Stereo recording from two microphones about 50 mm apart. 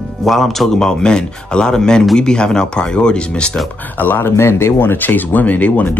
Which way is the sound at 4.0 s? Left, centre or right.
Left.